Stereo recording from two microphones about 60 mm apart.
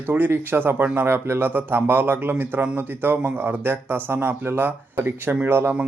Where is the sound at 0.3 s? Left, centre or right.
Right.